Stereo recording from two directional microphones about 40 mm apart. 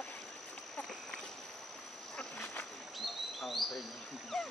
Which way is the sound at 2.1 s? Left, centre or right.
Left.